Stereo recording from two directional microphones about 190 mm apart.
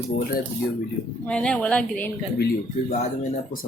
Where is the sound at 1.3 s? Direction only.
5° left (ahead or behind).